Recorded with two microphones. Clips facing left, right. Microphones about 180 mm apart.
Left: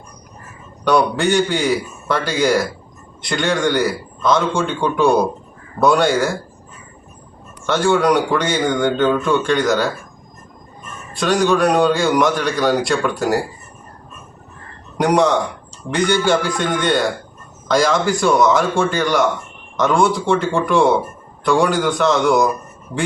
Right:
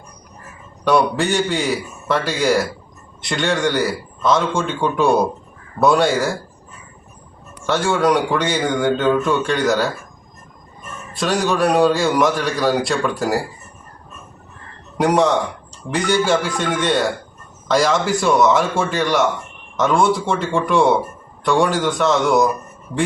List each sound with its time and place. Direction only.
0.9 s a man's voice: centre (ahead or behind)
7.7 s a man's voice: centre (ahead or behind)
11.1 s a man's voice: centre (ahead or behind)
14.9 s a man's voice: centre (ahead or behind)